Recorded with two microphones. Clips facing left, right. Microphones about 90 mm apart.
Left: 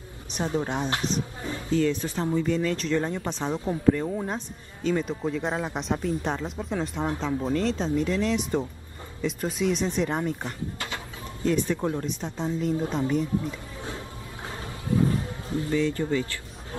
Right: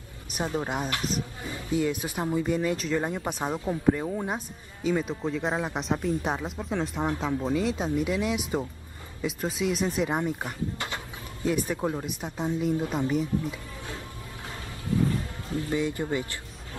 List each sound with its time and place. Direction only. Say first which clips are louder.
0.6 s speech: left 2 dB; 5° right (ahead or behind)
0.8 s speech: left 2 dB; 30° left (ahead or behind)
1.7 s speech: left 3 dB; 10° right (ahead or behind)
15.0 s music: left 2 dB; 25° left (ahead or behind)
15.7 s speech: left 3 dB; 20° right (ahead or behind)